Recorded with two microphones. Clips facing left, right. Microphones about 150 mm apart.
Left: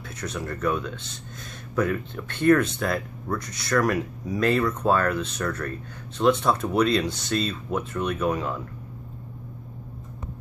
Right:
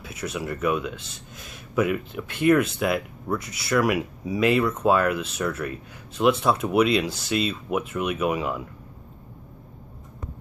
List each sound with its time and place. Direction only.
0.1 s speech: 5° right (ahead or behind)